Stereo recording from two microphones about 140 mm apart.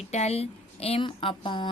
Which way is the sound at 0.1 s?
50° left (ahead or behind).